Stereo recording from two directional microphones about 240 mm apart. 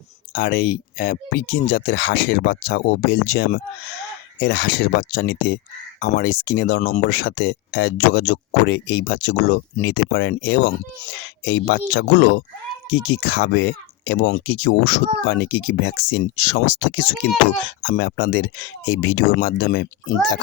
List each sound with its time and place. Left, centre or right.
0.3 s speech: left
17.7 s speech: left